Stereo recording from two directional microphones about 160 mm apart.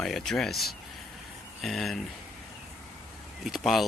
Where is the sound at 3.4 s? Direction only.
Centre (ahead or behind).